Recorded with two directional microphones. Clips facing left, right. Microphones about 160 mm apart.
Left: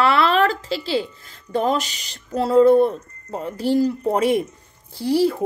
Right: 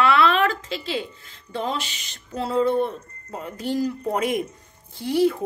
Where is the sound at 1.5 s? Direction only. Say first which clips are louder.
Left 7 dB; 45° left (ahead or behind).